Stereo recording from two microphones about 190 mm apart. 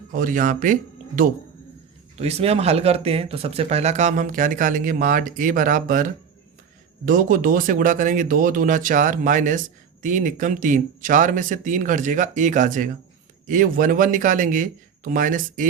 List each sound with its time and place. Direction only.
0.1 s speech: 45° right (ahead or behind)
2.1 s speech: 35° right (ahead or behind)